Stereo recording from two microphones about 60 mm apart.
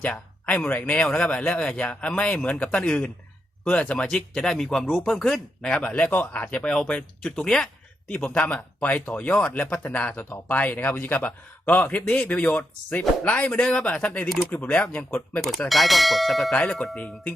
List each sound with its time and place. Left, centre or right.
0.0 s speech: left
0.9 s a man's voice: centre
7.3 s speech: centre
8.2 s a man's voice: left
15.4 s speech: centre